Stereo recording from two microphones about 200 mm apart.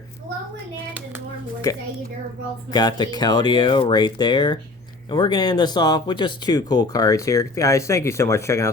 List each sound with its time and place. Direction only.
2.7 s speech: 20° left (ahead or behind)